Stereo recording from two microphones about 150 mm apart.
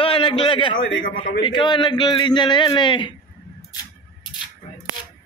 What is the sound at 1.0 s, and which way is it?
Speech, 65° left (ahead or behind).